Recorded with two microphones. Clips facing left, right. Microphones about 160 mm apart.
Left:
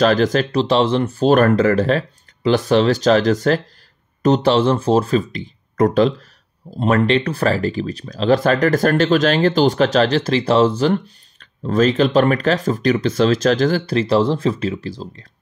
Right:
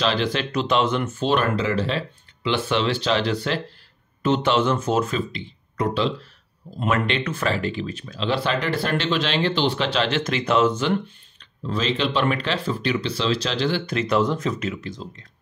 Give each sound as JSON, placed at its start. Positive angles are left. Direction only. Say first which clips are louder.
{"t": 0.0, "sound": "speech", "louder": "left 8 dB", "side_deg": 45}
{"t": 6.8, "sound": "speech", "louder": "left 7 dB", "side_deg": 35}